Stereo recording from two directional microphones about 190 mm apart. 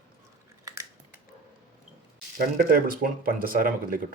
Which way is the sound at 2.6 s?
50° right (ahead or behind).